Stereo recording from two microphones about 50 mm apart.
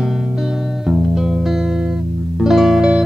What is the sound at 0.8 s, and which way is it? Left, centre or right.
Music, centre.